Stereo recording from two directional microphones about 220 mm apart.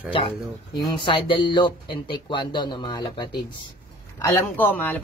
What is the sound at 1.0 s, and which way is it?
Speech, 25° left (ahead or behind).